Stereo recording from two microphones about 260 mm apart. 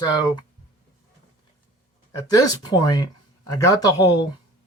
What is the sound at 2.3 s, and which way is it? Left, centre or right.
Speech, centre.